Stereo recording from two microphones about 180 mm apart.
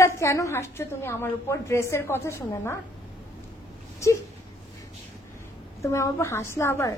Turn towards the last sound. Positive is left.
turn(degrees=15)  # may be behind; listen again after turning